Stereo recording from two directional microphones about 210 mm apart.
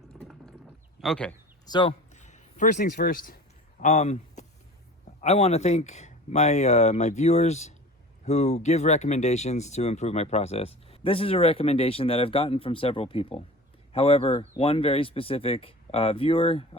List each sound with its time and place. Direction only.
0.1 s a sound: centre (ahead or behind)
1.0 s speech: 5° left (ahead or behind)
1.6 s speech: 20° left (ahead or behind)
2.1 s speech: 35° left (ahead or behind)